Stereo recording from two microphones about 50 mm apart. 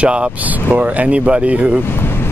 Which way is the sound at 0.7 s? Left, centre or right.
Right.